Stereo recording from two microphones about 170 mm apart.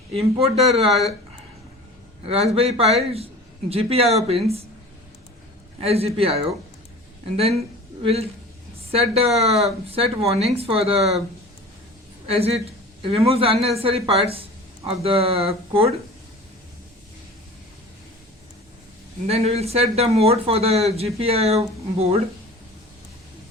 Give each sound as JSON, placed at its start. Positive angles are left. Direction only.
{"t": 0.1, "sound": "speech", "side_deg": -35}
{"t": 0.9, "sound": "speech", "side_deg": 0}
{"t": 2.2, "sound": "speech", "side_deg": -35}
{"t": 5.8, "sound": "speech", "side_deg": -35}
{"t": 8.0, "sound": "speech", "side_deg": -35}
{"t": 12.3, "sound": "speech", "side_deg": -35}
{"t": 19.3, "sound": "speech", "side_deg": -40}